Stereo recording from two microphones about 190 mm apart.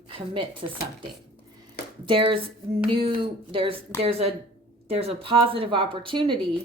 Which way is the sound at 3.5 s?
25° right (ahead or behind).